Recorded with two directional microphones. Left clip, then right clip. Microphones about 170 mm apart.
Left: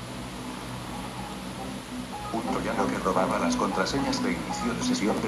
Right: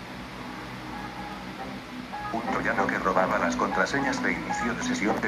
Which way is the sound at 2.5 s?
5° left (ahead or behind).